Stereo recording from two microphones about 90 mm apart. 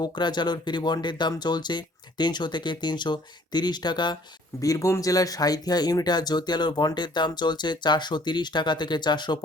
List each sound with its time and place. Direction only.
0.0 s speech: 55° left (ahead or behind)
4.6 s speech: 40° left (ahead or behind); by 9.4 s 55° left (ahead or behind)